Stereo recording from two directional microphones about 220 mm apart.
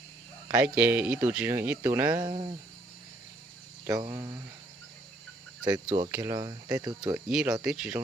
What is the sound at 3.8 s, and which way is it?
Speech, 15° right (ahead or behind).